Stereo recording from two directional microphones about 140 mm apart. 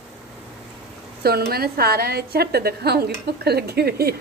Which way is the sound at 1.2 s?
90° right.